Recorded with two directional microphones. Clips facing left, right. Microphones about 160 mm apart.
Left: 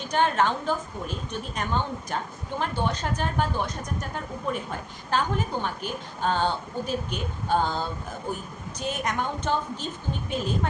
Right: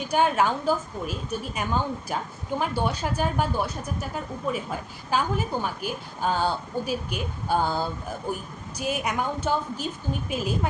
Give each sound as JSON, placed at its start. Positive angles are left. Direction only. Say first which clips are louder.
{"t": 0.0, "sound": "a woman's voice", "louder": "right 1 dB", "side_deg": -10}